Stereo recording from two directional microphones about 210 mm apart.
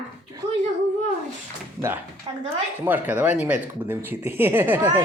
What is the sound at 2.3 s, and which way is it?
Speech, 20° right (ahead or behind).